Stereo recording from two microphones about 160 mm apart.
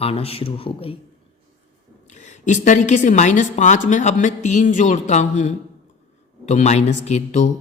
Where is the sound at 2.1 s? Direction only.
45° left (ahead or behind).